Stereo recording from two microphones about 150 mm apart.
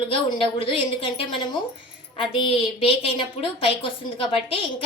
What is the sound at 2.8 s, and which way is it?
A woman's voice, 40° left (ahead or behind).